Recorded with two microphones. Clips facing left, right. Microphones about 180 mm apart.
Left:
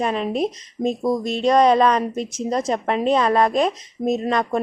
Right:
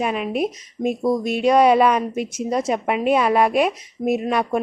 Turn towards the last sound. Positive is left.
turn(degrees=-10)  # may be behind; listen again after turning